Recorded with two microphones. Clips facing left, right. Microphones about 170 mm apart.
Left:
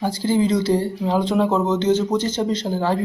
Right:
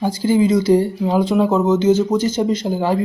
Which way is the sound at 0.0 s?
15° right (ahead or behind).